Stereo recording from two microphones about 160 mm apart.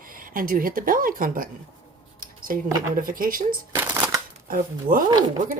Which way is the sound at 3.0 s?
60° right (ahead or behind).